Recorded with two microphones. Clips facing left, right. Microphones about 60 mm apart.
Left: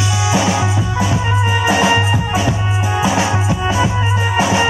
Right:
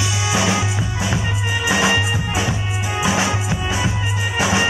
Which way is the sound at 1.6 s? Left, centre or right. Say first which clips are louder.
Left 3 dB; left.